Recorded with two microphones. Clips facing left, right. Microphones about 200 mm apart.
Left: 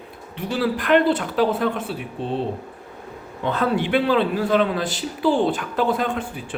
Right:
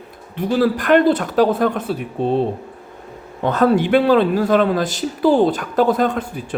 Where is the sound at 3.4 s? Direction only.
45° right (ahead or behind).